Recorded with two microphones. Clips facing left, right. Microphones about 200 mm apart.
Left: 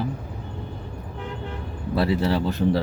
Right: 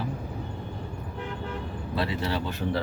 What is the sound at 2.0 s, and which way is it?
Speech, 35° left (ahead or behind).